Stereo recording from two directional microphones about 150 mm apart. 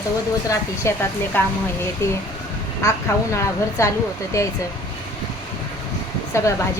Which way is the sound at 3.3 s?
20° left (ahead or behind).